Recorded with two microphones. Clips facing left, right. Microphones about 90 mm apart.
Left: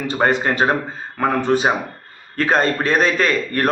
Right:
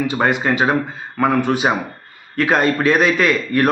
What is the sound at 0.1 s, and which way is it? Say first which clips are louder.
A man's voice: even; 40° left (ahead or behind).